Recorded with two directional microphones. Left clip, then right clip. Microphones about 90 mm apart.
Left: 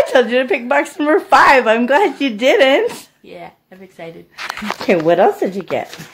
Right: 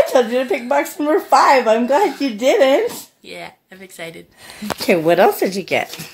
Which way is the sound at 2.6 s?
30° left (ahead or behind).